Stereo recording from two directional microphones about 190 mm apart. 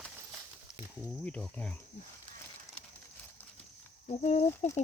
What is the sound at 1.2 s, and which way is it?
Speech, 5° left (ahead or behind).